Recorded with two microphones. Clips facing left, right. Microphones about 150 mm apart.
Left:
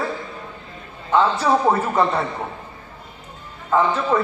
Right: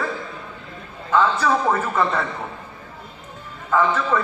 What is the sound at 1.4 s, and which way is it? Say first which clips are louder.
Speech: left 2 dB; 25° left (ahead or behind).